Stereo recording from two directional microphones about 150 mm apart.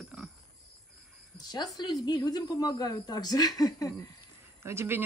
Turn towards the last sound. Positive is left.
turn(degrees=-15)  # may be behind; listen again after turning